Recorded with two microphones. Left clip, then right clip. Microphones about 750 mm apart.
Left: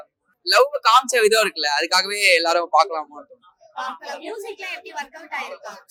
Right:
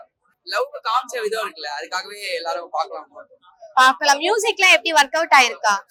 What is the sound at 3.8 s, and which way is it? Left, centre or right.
A woman's voice, right.